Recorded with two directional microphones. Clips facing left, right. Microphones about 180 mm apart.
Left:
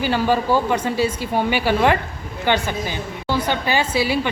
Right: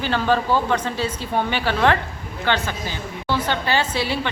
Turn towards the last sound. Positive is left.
turn(degrees=10)  # may be behind; listen again after turning